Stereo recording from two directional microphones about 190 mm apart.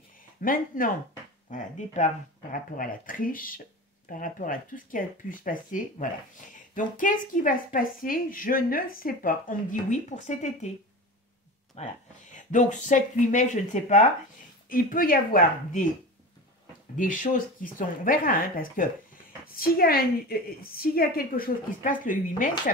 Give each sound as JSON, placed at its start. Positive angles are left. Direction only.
{"t": 0.4, "sound": "speech", "side_deg": 45}
{"t": 11.7, "sound": "speech", "side_deg": 40}
{"t": 16.9, "sound": "speech", "side_deg": 45}